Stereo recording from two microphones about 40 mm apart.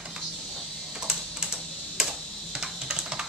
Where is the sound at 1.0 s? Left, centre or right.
Centre.